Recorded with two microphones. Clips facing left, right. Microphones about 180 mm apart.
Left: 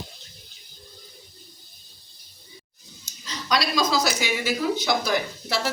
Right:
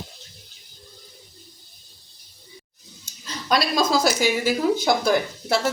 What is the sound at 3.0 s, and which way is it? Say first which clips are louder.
Speech: right 1 dB; 55° right (ahead or behind).